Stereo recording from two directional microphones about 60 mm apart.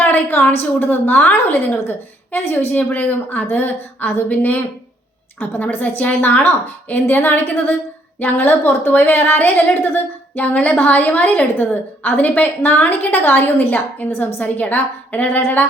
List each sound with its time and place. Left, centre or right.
0.0 s a woman's voice: left